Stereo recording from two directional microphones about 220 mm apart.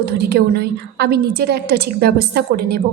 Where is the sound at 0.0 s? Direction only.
45° right (ahead or behind).